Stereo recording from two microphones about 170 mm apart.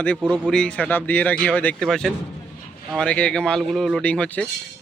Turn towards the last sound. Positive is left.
turn(degrees=5)  # may be behind; listen again after turning